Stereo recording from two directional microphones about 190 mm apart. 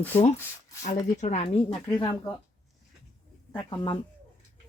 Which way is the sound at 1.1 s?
35° left (ahead or behind).